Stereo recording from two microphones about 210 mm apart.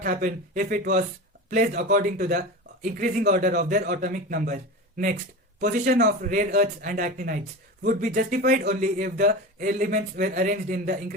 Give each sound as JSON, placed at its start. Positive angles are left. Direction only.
{"t": 0.0, "sound": "speech", "side_deg": -40}